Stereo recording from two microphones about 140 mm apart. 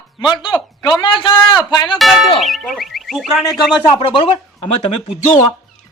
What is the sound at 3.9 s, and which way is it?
Speech, 35° left (ahead or behind).